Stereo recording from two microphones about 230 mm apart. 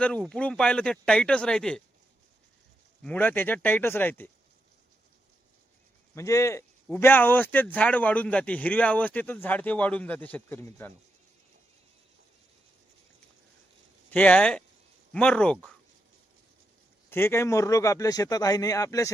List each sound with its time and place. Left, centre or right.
0.0 s speech: centre
3.0 s a man's voice: centre
6.1 s a man's voice: centre
14.1 s speech: centre
17.1 s a man's voice: centre